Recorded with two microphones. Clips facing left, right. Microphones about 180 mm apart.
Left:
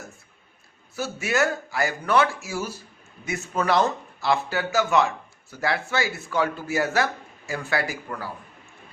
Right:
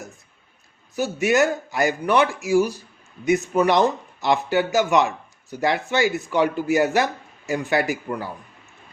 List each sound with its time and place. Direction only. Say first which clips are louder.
0.9 s speech: right 5 dB; 15° right (ahead or behind)